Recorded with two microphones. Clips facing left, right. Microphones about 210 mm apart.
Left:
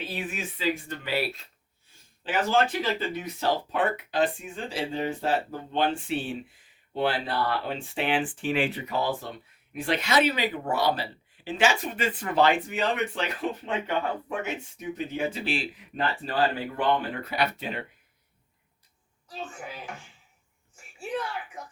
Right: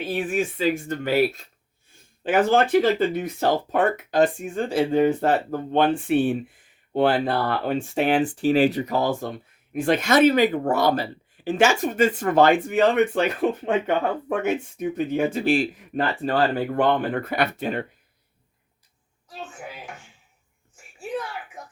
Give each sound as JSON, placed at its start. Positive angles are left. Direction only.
{"t": 0.0, "sound": "speech", "side_deg": -50}
{"t": 19.4, "sound": "speech", "side_deg": -5}
{"t": 21.0, "sound": "a sound", "side_deg": -5}